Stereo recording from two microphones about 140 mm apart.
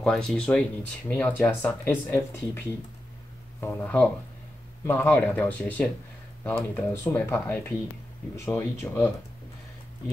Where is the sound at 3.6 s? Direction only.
10° left (ahead or behind).